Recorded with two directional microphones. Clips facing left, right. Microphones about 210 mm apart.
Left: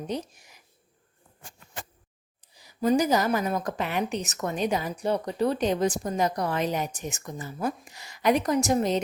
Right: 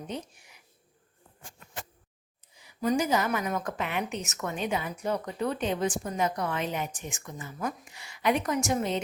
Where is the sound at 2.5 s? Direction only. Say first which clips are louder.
Left 4 dB; 35° left (ahead or behind).